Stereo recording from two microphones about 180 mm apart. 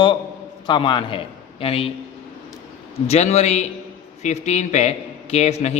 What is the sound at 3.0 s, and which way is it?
A man's voice, 35° left (ahead or behind).